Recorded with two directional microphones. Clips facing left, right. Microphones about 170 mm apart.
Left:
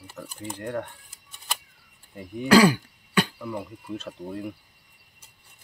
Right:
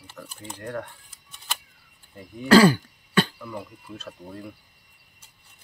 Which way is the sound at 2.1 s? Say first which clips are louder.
Right 2 dB; 15° left (ahead or behind).